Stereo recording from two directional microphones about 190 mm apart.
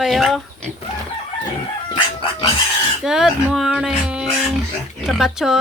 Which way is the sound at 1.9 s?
25° left (ahead or behind).